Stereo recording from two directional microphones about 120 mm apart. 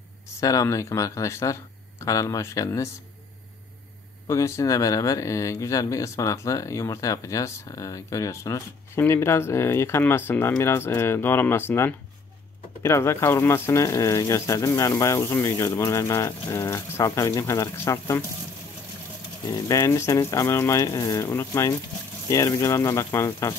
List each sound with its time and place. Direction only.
0.3 s speech: 25° left (ahead or behind)
4.3 s speech: 25° left (ahead or behind)
19.4 s speech: 35° left (ahead or behind)